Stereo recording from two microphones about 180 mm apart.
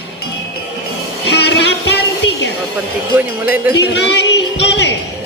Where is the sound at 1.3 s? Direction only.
70° left (ahead or behind).